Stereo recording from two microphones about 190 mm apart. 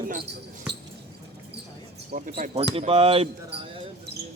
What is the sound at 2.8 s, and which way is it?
Speech, 30° right (ahead or behind).